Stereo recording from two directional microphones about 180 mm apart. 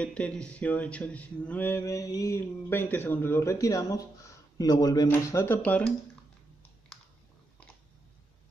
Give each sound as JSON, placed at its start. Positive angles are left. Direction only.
{"t": 0.0, "sound": "speech", "side_deg": 5}